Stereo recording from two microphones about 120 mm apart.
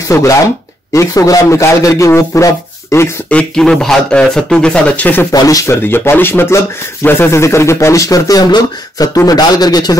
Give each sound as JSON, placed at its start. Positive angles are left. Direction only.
{"t": 0.1, "sound": "speech", "side_deg": 20}
{"t": 0.9, "sound": "speech", "side_deg": 30}
{"t": 3.3, "sound": "speech", "side_deg": 10}
{"t": 5.3, "sound": "speech", "side_deg": 30}
{"t": 5.9, "sound": "speech", "side_deg": 15}